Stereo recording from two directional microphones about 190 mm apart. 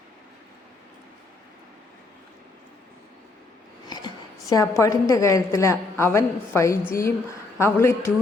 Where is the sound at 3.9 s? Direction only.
20° left (ahead or behind).